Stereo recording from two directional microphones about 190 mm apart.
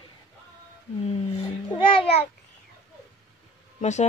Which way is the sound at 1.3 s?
25° left (ahead or behind).